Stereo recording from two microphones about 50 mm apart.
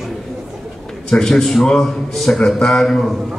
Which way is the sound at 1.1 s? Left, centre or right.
Centre.